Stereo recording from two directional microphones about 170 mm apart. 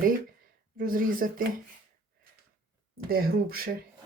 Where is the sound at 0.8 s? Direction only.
55° right (ahead or behind).